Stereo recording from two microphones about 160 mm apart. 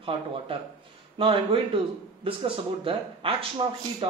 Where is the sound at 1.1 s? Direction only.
35° right (ahead or behind).